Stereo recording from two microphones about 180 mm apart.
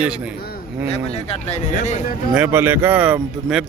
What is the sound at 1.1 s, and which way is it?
Speech, 35° left (ahead or behind).